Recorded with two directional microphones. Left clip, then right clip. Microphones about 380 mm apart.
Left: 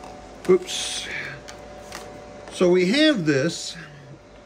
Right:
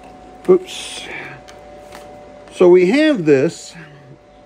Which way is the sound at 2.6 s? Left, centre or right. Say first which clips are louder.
Right 8 dB; centre.